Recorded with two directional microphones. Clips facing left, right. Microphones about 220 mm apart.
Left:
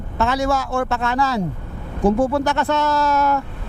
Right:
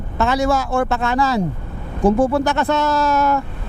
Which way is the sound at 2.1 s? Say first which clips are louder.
Right 2 dB; 25° right (ahead or behind).